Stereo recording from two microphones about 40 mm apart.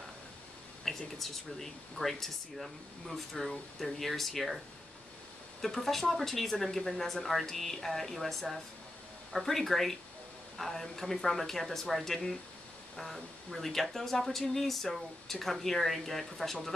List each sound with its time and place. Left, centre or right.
0.8 s speech: centre
5.6 s speech: centre